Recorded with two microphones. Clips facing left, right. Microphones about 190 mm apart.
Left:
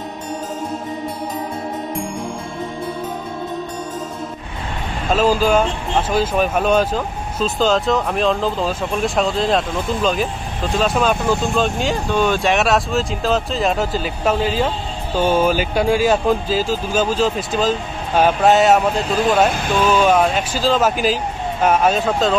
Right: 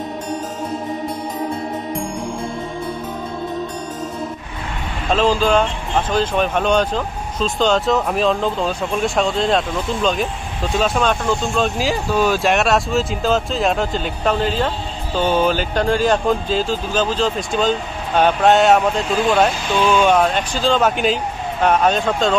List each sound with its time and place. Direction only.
5.1 s speech: 5° left (ahead or behind)
19.5 s speech: 55° left (ahead or behind)
19.9 s speech: 5° left (ahead or behind)